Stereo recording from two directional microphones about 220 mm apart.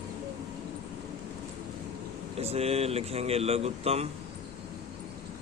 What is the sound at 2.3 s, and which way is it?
Speech, 30° right (ahead or behind).